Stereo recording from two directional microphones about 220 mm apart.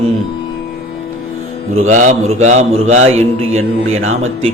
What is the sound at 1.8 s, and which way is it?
Mantra, 35° right (ahead or behind).